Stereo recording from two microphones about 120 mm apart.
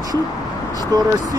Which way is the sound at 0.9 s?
30° right (ahead or behind).